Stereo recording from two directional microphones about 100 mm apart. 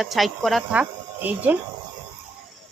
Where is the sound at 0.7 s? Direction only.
15° right (ahead or behind).